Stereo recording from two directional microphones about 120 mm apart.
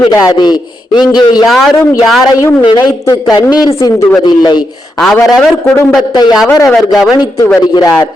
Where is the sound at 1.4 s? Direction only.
Centre (ahead or behind).